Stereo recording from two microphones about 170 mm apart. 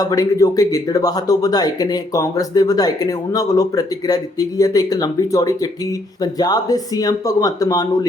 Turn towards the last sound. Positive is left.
turn(degrees=20)  # may be behind; listen again after turning